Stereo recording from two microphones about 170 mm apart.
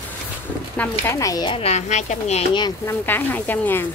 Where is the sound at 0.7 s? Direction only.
15° left (ahead or behind).